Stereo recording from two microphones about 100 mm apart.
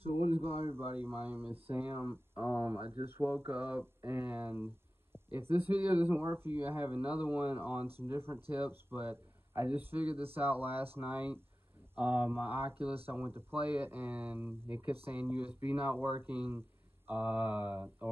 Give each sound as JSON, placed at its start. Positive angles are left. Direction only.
{"t": 0.4, "sound": "a man's voice", "side_deg": -25}
{"t": 17.1, "sound": "mantra", "side_deg": -15}